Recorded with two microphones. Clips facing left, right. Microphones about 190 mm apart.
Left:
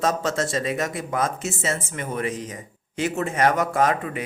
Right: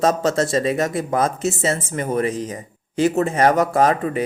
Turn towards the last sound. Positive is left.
turn(degrees=-35)  # may be behind; listen again after turning